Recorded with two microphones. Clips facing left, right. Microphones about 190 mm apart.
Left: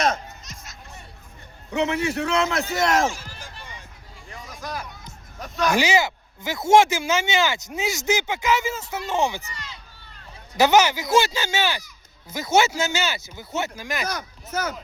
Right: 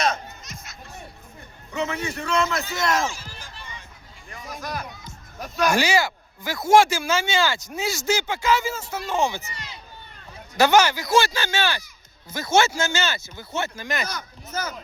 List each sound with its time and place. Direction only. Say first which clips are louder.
0.0 s children playing: left 1 dB; 45° left (ahead or behind)
1.7 s a man's voice: left 4 dB; 70° left (ahead or behind)
2.6 s a sound: left 3 dB; 50° left (ahead or behind)
5.4 s speech: right 1 dB; centre (ahead or behind)
5.7 s speech: left 4 dB; 20° left (ahead or behind)
10.6 s speech: even; 20° left (ahead or behind)
14.5 s a man's voice: left 3 dB; 70° left (ahead or behind)